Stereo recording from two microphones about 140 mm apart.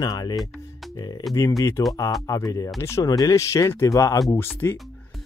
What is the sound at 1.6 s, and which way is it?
Speech, 20° left (ahead or behind).